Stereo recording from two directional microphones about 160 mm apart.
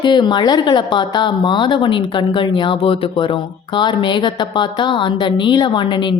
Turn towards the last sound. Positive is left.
turn(degrees=30)  # may be behind; listen again after turning